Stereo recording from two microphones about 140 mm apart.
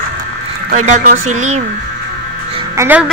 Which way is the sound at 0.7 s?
65° right (ahead or behind).